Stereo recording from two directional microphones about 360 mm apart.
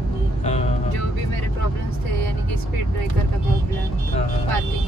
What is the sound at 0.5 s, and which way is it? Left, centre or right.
Music, centre.